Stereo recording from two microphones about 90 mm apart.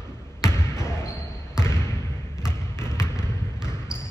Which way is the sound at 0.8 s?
30° left (ahead or behind).